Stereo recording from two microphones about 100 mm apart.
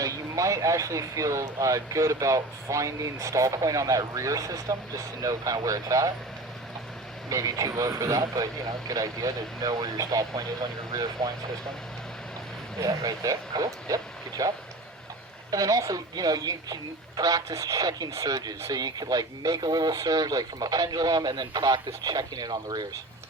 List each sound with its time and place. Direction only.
0.0 s speech: 35° right (ahead or behind)
7.3 s speech: 35° right (ahead or behind)
12.8 s speech: 35° right (ahead or behind)